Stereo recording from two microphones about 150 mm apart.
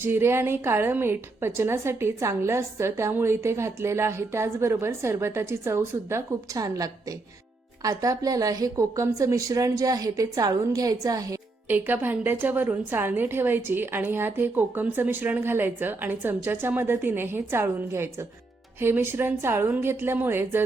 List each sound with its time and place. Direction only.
0.0 s a woman's voice: 15° right (ahead or behind)
11.9 s a woman's voice: 15° right (ahead or behind)